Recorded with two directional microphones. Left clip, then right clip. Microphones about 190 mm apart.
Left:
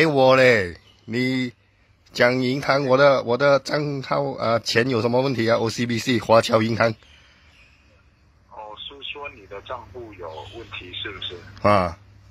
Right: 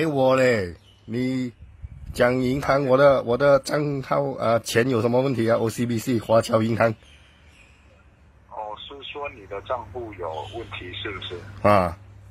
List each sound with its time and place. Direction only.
0.0 s a man's voice: 15° left (ahead or behind)
8.5 s speech: centre (ahead or behind)